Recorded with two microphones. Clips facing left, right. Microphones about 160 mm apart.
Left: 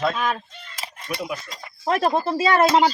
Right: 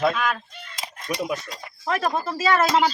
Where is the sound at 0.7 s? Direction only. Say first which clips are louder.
Right 1 dB; 15° right (ahead or behind).